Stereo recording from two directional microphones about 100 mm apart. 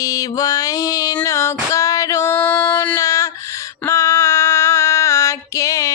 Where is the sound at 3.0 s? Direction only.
35° left (ahead or behind).